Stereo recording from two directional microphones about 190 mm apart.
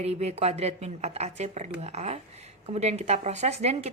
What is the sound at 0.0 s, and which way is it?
A woman's voice, 35° right (ahead or behind).